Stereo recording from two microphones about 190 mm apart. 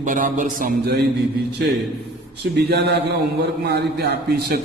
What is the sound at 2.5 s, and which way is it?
A man's voice, 65° right (ahead or behind).